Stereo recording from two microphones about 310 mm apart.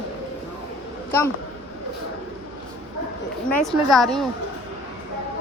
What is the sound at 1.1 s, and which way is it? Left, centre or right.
Speech, centre.